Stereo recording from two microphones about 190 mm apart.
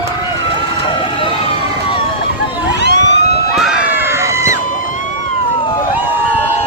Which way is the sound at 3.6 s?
5° right (ahead or behind).